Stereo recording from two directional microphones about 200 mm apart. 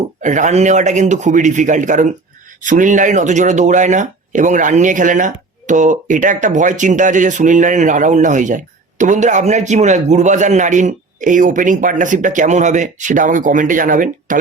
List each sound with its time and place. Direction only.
0.2 s speech: 40° right (ahead or behind)